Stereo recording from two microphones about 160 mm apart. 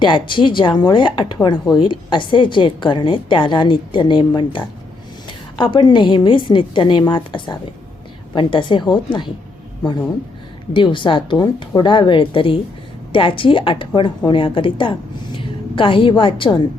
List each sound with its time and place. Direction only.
0.0 s a woman's voice: 30° left (ahead or behind)
10.8 s a woman's voice: 30° left (ahead or behind)